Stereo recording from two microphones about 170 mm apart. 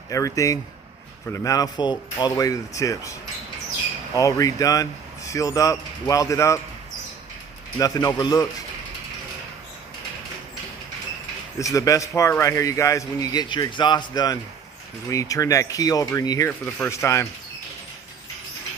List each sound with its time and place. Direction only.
0.1 s speech: 20° left (ahead or behind)
7.8 s speech: 20° left (ahead or behind)
11.6 s speech: 20° left (ahead or behind)
16.5 s speech: 10° left (ahead or behind)